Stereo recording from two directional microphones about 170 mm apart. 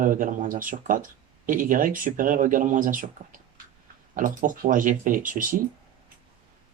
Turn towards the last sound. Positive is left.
turn(degrees=-55)  # may be behind; listen again after turning